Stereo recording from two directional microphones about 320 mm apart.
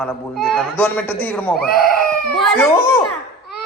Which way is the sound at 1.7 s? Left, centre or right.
Left.